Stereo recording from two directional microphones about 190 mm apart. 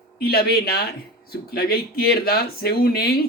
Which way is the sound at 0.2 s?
55° left (ahead or behind).